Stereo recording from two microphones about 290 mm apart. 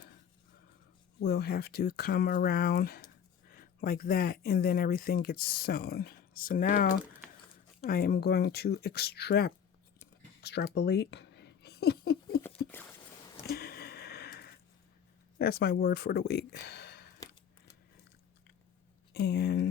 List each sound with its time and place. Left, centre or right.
1.2 s speech: left
10.4 s a sound: left
12.4 s patter: centre
13.5 s a sound: left
15.4 s speech: left
19.1 s speech: left